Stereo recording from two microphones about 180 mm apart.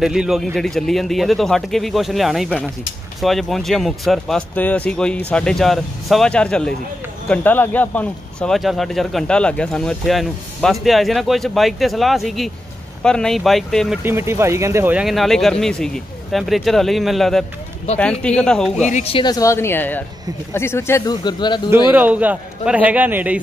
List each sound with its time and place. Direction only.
0.0 s speech: centre (ahead or behind)
14.0 s speech: 15° right (ahead or behind); by 18.9 s 5° left (ahead or behind)
18.9 s speech: 35° left (ahead or behind)
21.9 s a man's voice: 10° right (ahead or behind)